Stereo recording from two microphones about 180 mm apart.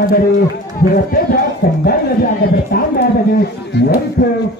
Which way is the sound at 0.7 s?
55° left (ahead or behind).